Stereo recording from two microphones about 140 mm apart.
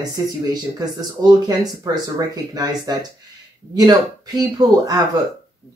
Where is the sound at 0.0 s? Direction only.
25° right (ahead or behind).